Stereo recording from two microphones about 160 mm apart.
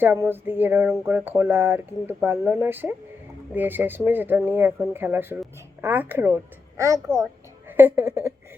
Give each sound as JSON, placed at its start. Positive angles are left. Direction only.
{"t": 0.0, "sound": "speech", "side_deg": -15}